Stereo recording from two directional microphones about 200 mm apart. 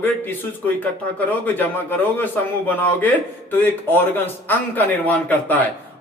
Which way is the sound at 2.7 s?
10° left (ahead or behind).